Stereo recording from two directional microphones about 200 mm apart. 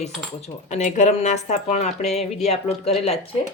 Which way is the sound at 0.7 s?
35° left (ahead or behind).